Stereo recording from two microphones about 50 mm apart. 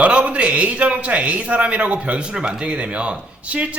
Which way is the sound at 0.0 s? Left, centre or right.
Right.